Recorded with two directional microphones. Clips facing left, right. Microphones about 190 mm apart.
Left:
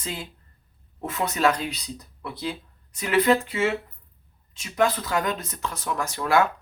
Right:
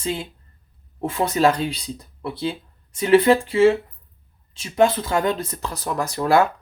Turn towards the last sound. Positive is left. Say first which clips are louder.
# right 4 dB
turn(degrees=-35)  # may be behind; listen again after turning